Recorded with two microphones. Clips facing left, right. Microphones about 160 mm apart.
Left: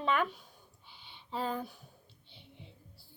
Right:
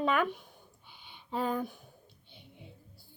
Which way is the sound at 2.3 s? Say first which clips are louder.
Right 2 dB; 50° right (ahead or behind).